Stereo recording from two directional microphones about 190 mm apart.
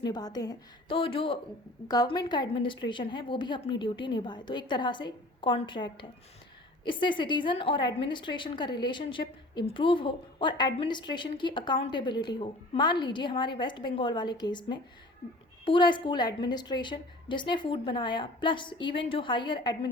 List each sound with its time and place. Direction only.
0.1 s a woman's voice: 20° left (ahead or behind)